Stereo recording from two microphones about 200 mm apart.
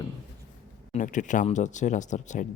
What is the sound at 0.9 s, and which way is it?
Speech, 40° left (ahead or behind).